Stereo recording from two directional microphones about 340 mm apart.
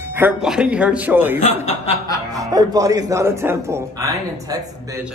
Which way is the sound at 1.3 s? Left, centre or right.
Centre.